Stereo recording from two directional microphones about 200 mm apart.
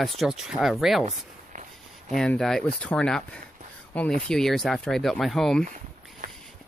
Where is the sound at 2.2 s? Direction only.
Centre (ahead or behind).